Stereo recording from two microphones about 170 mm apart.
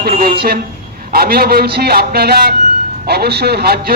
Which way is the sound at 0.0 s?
65° right (ahead or behind).